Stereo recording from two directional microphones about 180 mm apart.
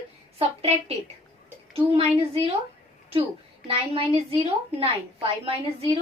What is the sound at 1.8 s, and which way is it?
Speech, 30° right (ahead or behind).